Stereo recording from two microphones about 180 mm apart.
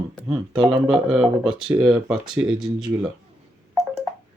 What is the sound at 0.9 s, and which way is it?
Speech, 5° right (ahead or behind).